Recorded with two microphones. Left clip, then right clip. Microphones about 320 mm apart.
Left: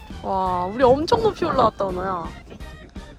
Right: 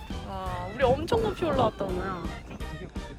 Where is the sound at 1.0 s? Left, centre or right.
Centre.